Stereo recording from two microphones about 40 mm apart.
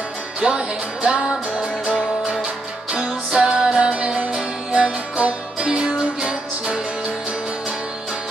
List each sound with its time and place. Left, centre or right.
0.4 s music: right
2.4 s music: centre